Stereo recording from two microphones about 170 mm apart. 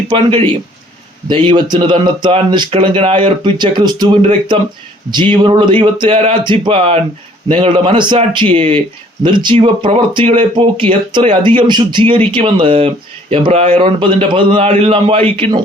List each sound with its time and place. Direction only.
0.3 s speech: 30° right (ahead or behind)